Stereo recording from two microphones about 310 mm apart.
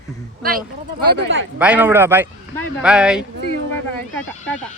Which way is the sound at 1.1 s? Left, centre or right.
Right.